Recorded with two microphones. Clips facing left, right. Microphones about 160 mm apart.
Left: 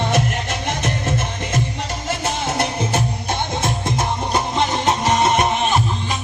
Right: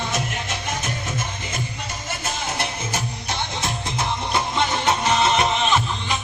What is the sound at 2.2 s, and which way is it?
Music, 65° left (ahead or behind).